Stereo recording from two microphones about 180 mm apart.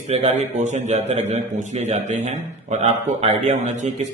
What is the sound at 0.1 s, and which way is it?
A man's voice, 40° right (ahead or behind).